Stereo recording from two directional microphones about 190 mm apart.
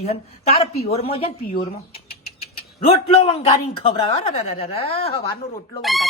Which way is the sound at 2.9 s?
30° left (ahead or behind).